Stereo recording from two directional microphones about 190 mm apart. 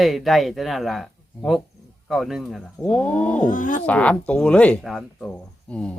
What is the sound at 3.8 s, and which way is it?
Speech, 5° left (ahead or behind).